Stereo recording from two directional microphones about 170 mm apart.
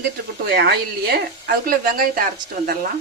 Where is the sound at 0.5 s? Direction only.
70° right (ahead or behind).